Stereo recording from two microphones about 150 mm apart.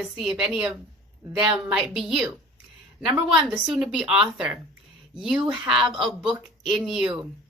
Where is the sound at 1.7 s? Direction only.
5° right (ahead or behind).